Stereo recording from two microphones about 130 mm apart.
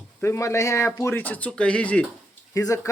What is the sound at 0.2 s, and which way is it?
Speech, 20° left (ahead or behind).